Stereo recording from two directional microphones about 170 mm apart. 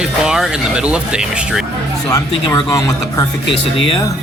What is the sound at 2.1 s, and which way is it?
Speech, 20° left (ahead or behind).